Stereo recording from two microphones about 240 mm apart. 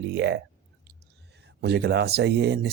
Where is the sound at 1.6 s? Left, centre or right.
Right.